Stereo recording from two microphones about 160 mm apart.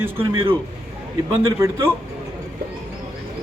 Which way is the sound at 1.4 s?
15° right (ahead or behind).